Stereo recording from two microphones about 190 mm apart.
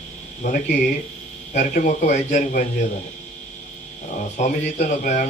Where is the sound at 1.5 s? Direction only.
45° left (ahead or behind).